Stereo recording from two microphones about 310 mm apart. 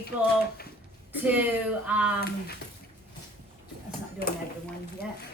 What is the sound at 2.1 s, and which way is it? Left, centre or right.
Speech, left.